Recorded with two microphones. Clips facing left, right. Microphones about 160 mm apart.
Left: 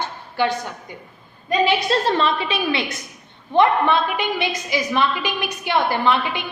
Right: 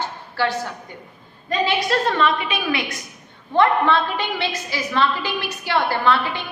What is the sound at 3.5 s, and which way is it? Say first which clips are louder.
A woman's voice: left 1 dB; 15° left (ahead or behind).